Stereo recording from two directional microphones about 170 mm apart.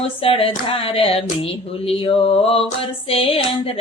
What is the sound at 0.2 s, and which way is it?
Female singing, 35° left (ahead or behind).